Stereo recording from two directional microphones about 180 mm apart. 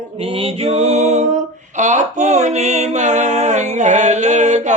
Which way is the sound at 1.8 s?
40° right (ahead or behind).